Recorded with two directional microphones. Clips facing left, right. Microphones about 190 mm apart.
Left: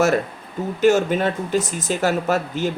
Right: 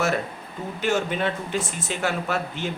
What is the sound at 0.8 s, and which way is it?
Speech, 40° left (ahead or behind).